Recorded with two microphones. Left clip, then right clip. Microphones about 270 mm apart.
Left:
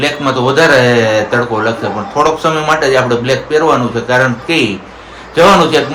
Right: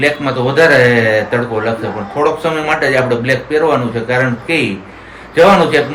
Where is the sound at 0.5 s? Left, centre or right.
Centre.